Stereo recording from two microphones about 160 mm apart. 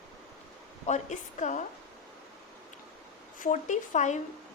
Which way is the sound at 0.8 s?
45° left (ahead or behind).